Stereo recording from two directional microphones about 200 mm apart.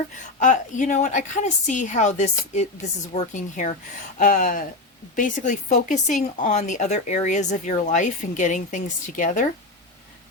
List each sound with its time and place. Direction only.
0.3 s speech: 40° left (ahead or behind)